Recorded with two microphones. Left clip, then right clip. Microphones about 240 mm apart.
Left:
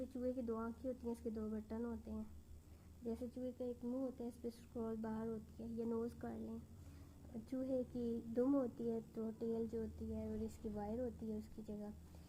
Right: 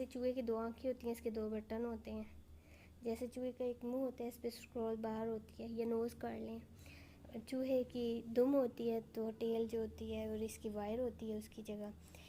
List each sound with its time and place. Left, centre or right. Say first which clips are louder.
0.1 s a woman's voice: right 5 dB; right